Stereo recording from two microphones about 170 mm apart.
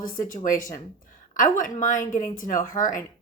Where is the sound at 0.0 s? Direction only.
50° left (ahead or behind).